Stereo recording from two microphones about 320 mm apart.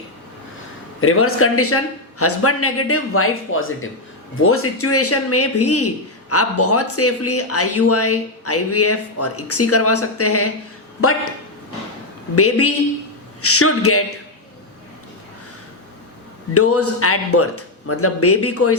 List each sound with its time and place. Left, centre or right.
1.0 s a man's voice: left
12.4 s a man's voice: left
16.6 s a man's voice: left